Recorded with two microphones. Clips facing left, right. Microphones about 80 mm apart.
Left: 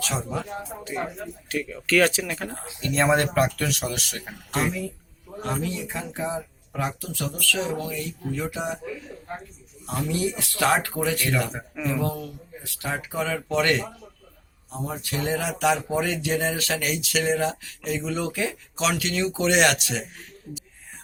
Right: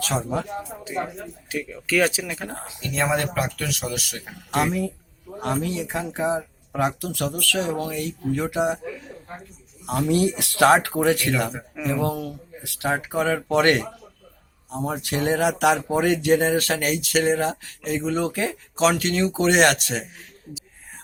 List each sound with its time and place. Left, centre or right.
0.0 s speech: right
0.9 s speech: centre
5.4 s speech: right
9.8 s speech: right